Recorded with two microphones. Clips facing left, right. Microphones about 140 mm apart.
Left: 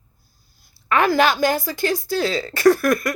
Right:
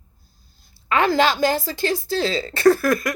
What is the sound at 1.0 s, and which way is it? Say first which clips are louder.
Speech: left 1 dB; 25° right (ahead or behind).